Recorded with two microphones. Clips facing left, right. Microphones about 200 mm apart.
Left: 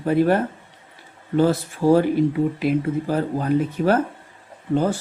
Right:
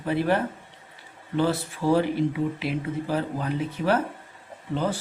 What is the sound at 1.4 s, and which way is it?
Speech, 45° left (ahead or behind).